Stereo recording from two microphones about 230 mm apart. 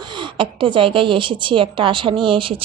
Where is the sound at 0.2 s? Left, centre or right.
Right.